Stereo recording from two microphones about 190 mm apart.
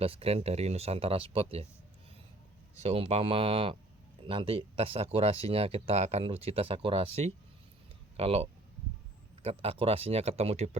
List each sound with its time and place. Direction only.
0.0 s speech: 30° right (ahead or behind)
2.8 s speech: 35° right (ahead or behind)